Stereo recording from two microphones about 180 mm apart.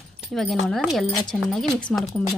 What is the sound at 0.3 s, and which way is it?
A woman's voice, centre (ahead or behind).